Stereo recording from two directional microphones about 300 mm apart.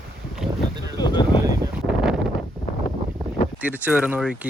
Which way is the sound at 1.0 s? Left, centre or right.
Centre.